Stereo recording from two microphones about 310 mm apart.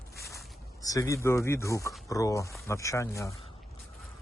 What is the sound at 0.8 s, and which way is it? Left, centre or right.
Speech, centre.